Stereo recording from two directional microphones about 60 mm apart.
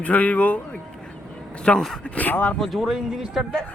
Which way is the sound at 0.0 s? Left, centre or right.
Left.